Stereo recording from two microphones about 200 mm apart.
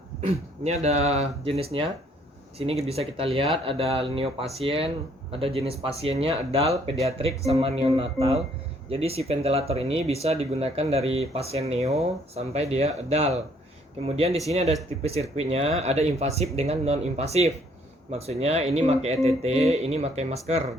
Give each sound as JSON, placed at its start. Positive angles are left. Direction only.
{"t": 0.2, "sound": "speech", "side_deg": -35}